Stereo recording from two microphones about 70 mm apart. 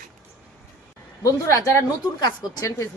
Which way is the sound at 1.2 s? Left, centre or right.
Left.